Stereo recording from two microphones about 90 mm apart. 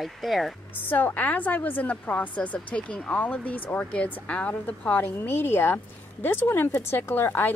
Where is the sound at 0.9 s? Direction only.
20° left (ahead or behind).